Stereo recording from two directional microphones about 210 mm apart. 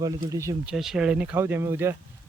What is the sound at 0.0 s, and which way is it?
Speech, 15° right (ahead or behind).